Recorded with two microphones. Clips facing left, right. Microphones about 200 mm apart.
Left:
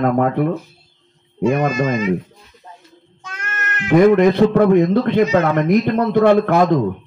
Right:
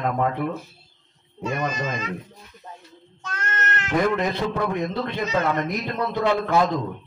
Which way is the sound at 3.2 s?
10° left (ahead or behind).